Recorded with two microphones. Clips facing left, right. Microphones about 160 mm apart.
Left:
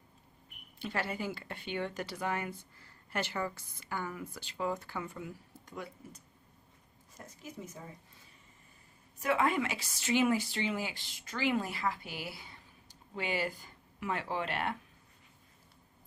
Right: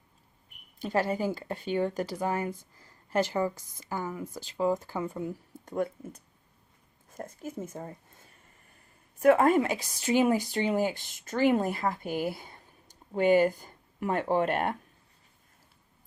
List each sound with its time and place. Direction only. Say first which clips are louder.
0.8 s speech: right 8 dB; 40° right (ahead or behind); by 4.8 s 25° right (ahead or behind)
4.9 s speech: right 8 dB; 40° right (ahead or behind)
7.1 s speech: right 10 dB; 50° right (ahead or behind)